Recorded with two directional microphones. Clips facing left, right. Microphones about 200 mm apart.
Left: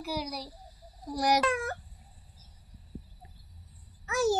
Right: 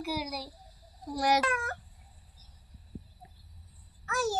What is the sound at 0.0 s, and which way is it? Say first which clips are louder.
A child's voice: even; 5° right (ahead or behind).